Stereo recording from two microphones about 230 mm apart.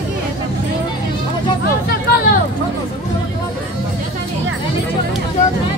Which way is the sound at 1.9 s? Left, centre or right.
Left.